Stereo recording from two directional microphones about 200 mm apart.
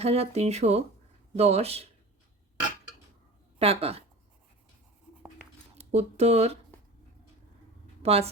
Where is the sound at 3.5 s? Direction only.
30° right (ahead or behind).